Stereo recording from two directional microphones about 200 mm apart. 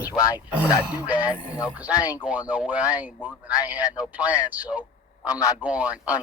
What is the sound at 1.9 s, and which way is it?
Speech, 20° left (ahead or behind).